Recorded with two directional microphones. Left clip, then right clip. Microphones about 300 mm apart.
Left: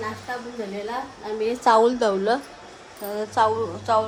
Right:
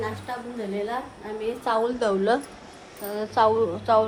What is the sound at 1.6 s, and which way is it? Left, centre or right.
A woman's voice, left.